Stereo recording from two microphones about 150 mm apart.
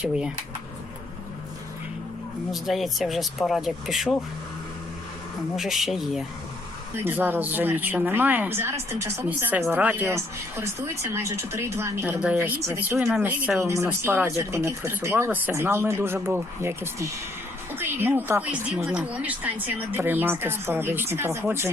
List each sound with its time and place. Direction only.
0.0 s speech: 5° right (ahead or behind)
2.5 s speech: centre (ahead or behind)
5.5 s speech: centre (ahead or behind)
7.0 s speech: 10° right (ahead or behind)
13.1 s speech: centre (ahead or behind)
13.6 s speech: 20° right (ahead or behind)